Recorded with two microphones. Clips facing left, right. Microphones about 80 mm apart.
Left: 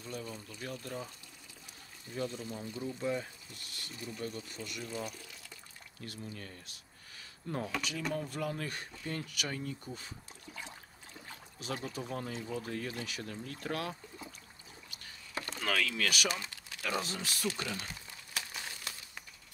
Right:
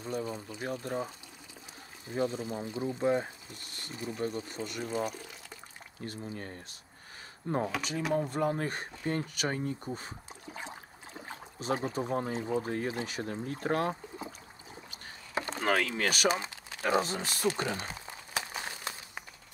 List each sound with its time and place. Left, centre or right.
0.0 s speech: right
3.0 s speech: right
14.9 s rowboat: right